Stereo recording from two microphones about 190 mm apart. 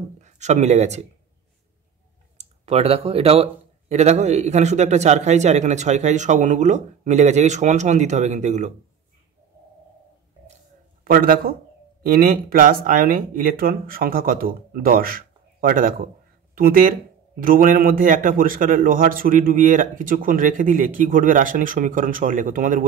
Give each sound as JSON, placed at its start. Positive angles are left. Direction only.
{"t": 0.2, "sound": "speech", "side_deg": -35}
{"t": 2.3, "sound": "a man's voice", "side_deg": -35}
{"t": 11.1, "sound": "a man's voice", "side_deg": -50}